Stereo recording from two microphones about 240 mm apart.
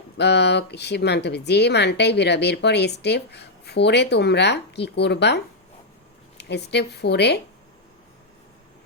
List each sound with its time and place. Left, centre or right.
0.2 s speech: left